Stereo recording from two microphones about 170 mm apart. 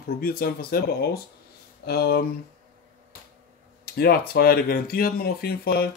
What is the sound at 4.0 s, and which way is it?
Speech, 65° left (ahead or behind).